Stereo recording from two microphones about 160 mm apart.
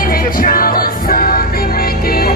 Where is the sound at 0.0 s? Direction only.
65° left (ahead or behind).